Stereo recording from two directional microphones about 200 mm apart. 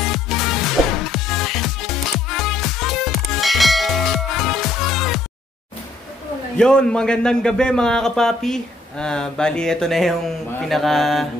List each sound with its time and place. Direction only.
0.0 s music: centre (ahead or behind)
6.5 s a man's voice: 5° left (ahead or behind)